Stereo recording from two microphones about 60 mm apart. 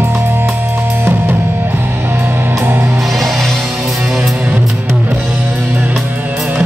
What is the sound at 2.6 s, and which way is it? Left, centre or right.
Music, right.